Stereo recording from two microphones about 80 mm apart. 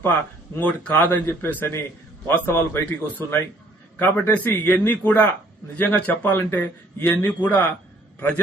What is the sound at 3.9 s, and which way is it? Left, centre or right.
A man's voice, left.